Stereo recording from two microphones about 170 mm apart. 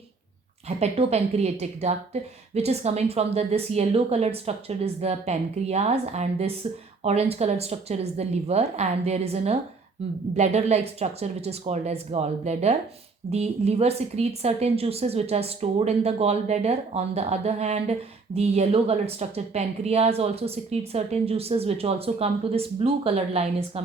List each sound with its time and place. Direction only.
0.8 s a woman's voice: 40° right (ahead or behind)